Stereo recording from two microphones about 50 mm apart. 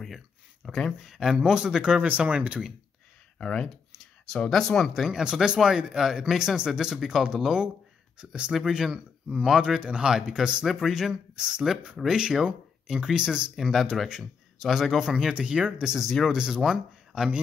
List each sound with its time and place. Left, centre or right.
0.7 s speech: centre
1.0 s speech: centre
2.0 s speech: right
3.3 s speech: centre
5.0 s speech: centre
13.6 s speech: centre
15.3 s speech: centre